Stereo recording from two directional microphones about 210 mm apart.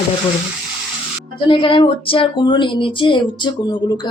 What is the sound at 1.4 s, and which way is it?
Speech, 25° left (ahead or behind).